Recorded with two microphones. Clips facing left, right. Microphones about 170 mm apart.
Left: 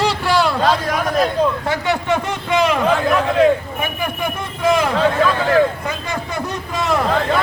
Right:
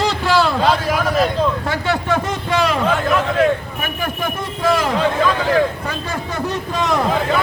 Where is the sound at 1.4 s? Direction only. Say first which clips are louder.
Left 1 dB; 15° left (ahead or behind).